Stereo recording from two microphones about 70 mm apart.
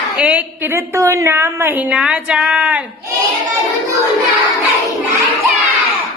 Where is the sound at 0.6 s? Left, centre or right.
Right; by 2.8 s centre.